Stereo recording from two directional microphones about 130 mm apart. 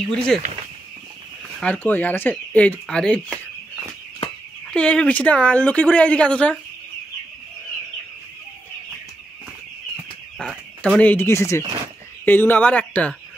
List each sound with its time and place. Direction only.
0.0 s speech: 5° left (ahead or behind)
1.6 s speech: 10° left (ahead or behind)
4.6 s speech: 5° left (ahead or behind)
10.4 s speech: 10° left (ahead or behind)